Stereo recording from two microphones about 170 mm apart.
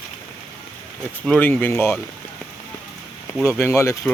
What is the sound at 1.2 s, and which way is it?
Speech, 10° left (ahead or behind).